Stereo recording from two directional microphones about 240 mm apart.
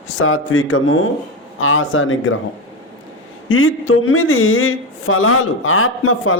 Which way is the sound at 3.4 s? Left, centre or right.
Left.